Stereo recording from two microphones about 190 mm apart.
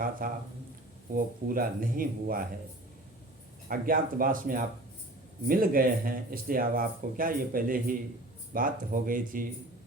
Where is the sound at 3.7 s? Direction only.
50° right (ahead or behind).